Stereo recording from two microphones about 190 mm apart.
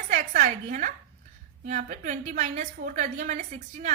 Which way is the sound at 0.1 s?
40° right (ahead or behind).